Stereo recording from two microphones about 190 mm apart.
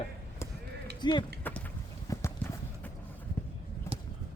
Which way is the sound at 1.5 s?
10° left (ahead or behind).